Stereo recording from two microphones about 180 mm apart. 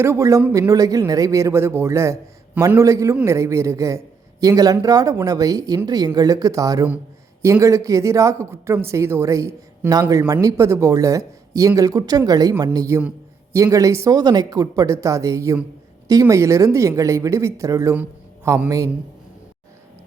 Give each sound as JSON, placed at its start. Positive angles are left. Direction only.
{"t": 0.0, "sound": "a man's voice", "side_deg": -15}